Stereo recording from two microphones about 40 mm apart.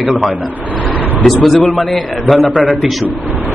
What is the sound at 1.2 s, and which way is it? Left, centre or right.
Speech, centre.